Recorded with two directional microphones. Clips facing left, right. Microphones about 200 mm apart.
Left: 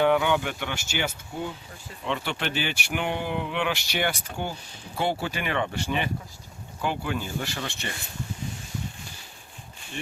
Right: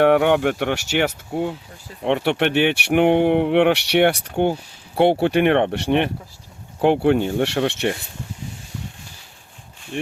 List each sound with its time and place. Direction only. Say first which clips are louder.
0.0 s speech: right 7 dB; 65° right (ahead or behind)